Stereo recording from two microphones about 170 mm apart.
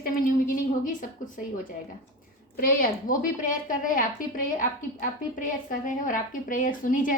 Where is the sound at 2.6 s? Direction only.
55° left (ahead or behind).